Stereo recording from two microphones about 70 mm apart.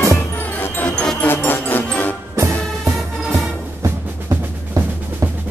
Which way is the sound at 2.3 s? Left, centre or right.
Right.